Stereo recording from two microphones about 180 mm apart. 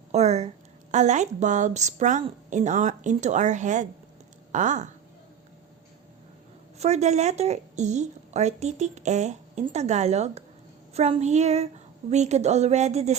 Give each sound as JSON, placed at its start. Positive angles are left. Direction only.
{"t": 0.1, "sound": "a woman's voice", "side_deg": -35}
{"t": 6.7, "sound": "a woman's voice", "side_deg": -40}